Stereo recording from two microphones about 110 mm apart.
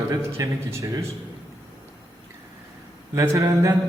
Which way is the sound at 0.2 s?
25° right (ahead or behind).